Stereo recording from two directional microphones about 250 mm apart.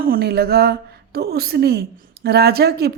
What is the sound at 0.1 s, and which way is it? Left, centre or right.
A woman's voice, right.